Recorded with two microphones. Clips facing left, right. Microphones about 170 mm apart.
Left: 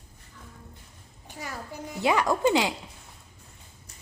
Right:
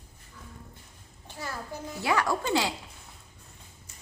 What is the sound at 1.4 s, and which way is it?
A child's voice, 15° left (ahead or behind).